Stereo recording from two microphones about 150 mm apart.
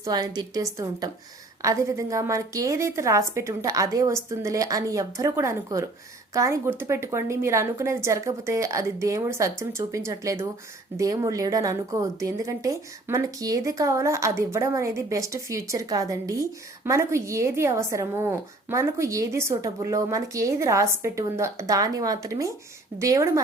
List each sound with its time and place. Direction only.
0.0 s speech: 25° right (ahead or behind)